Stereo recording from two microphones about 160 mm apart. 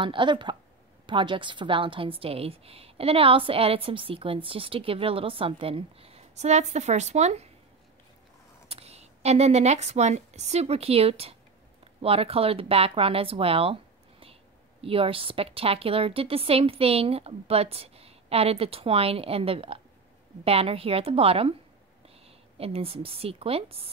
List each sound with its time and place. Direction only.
0.0 s a woman's voice: 30° right (ahead or behind)
8.6 s a woman's voice: 40° right (ahead or behind)
14.8 s a woman's voice: 35° right (ahead or behind)
22.6 s a woman's voice: 40° right (ahead or behind)